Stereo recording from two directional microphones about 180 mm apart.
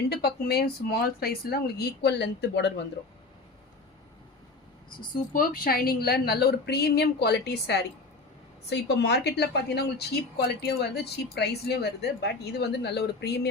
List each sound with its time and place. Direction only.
0.1 s speech: 65° left (ahead or behind)
5.3 s speech: 55° left (ahead or behind)